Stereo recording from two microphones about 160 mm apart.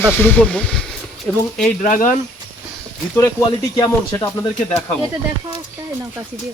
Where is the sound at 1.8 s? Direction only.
50° left (ahead or behind).